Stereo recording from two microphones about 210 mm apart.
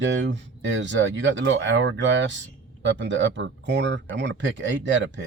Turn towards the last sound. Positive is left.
turn(degrees=-60)  # may be behind; listen again after turning